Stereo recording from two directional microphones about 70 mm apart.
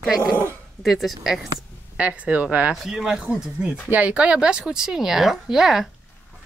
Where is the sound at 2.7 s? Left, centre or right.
Centre.